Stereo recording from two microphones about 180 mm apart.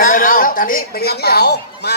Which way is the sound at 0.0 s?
50° left (ahead or behind).